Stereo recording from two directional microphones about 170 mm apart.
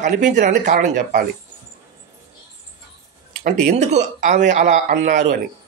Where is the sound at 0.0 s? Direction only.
45° right (ahead or behind).